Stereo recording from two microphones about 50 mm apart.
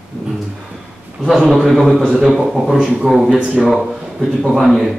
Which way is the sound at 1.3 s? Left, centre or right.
Centre.